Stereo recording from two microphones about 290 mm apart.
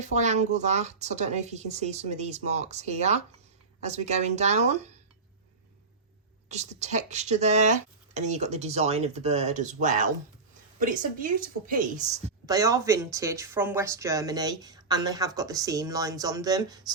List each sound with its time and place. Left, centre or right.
0.0 s speech: right
6.5 s speech: right
12.5 s speech: centre